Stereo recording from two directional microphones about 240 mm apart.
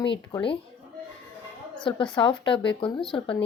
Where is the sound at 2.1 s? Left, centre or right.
Centre.